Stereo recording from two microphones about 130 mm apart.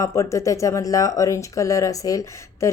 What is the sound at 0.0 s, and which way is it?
Speech, 25° left (ahead or behind).